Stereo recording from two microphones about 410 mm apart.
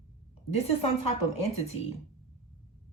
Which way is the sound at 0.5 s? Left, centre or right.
Centre.